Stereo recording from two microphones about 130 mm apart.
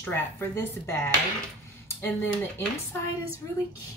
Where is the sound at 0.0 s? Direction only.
15° left (ahead or behind).